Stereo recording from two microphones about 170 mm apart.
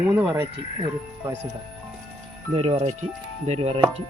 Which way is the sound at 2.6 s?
35° right (ahead or behind).